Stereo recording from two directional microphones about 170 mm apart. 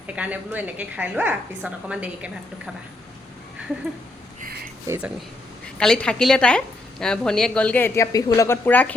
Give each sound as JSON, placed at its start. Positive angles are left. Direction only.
{"t": 0.2, "sound": "a woman's voice", "side_deg": -10}
{"t": 4.4, "sound": "a sound", "side_deg": -60}
{"t": 5.7, "sound": "a woman's voice", "side_deg": 5}